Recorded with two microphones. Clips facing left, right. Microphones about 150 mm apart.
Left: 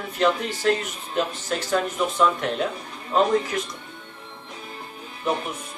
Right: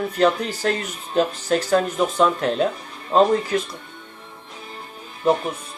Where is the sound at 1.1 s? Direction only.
35° right (ahead or behind).